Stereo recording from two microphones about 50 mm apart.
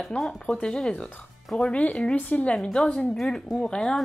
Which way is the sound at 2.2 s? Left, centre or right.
Left.